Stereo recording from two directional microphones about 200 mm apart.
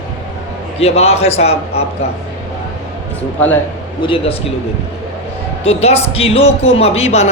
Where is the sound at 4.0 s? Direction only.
25° left (ahead or behind).